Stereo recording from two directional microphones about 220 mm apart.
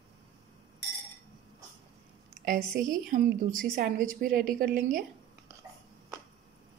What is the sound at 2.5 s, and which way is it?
A woman's voice, 35° right (ahead or behind).